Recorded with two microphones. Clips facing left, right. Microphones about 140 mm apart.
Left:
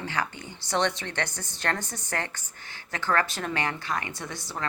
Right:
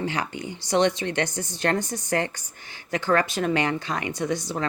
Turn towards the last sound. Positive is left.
turn(degrees=-15)  # may be behind; listen again after turning